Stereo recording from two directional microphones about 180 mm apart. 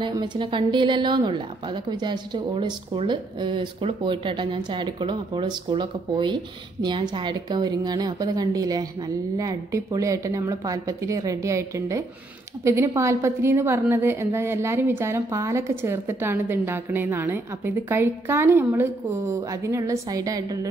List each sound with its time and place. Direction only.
0.0 s a woman's voice: 25° right (ahead or behind)